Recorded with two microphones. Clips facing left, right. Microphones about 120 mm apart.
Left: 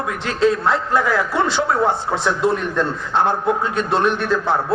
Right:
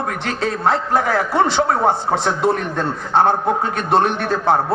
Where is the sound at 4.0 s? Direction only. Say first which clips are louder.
Even; 55° right (ahead or behind).